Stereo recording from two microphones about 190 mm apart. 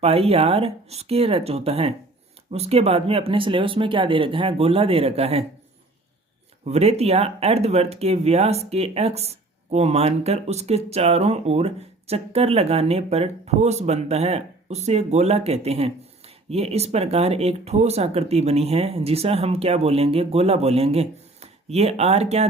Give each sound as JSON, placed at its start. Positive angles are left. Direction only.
{"t": 0.0, "sound": "speech", "side_deg": -30}
{"t": 6.7, "sound": "speech", "side_deg": -35}